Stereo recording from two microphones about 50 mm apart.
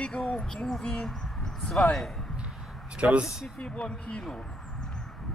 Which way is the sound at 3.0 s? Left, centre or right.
Right.